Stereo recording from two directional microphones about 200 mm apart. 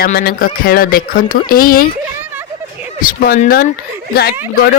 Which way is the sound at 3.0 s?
45° left (ahead or behind).